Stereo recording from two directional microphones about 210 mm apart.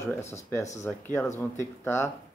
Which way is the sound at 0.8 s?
10° left (ahead or behind).